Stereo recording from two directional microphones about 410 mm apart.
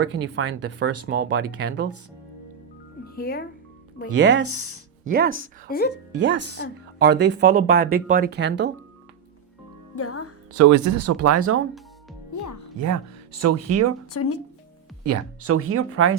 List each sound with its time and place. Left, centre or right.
0.0 s speech: right
3.2 s speech: left
4.2 s speech: right
5.0 s speech: right
5.6 s speech: left
6.1 s speech: right
9.9 s speech: left
10.5 s speech: right
12.3 s speech: left
12.8 s speech: right
14.1 s speech: left
15.0 s speech: right